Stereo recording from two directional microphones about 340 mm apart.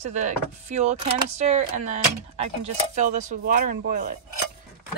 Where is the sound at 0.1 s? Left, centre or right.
Centre.